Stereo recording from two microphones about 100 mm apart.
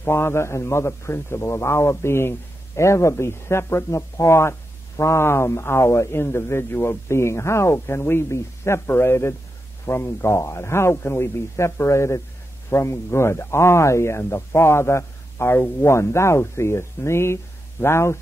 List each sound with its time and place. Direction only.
0.0 s a man's voice: 25° left (ahead or behind)